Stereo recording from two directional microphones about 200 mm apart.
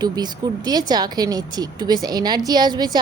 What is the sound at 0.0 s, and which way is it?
A woman's voice, 20° right (ahead or behind).